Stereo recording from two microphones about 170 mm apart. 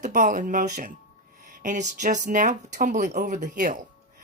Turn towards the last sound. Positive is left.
turn(degrees=-50)  # may be behind; listen again after turning